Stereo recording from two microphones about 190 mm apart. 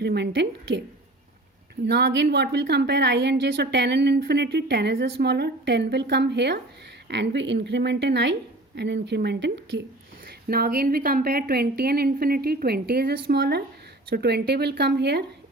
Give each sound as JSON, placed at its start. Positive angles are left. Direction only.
{"t": 0.0, "sound": "a woman's voice", "side_deg": -60}
{"t": 1.9, "sound": "a woman's voice", "side_deg": -60}
{"t": 10.5, "sound": "a woman's voice", "side_deg": -55}